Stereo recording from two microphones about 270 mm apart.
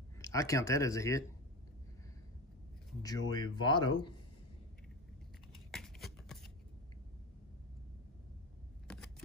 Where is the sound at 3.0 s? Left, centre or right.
Centre.